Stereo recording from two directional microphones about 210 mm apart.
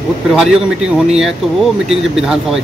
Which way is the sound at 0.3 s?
Centre (ahead or behind).